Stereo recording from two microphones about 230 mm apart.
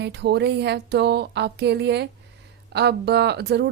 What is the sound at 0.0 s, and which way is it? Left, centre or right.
Speech, right.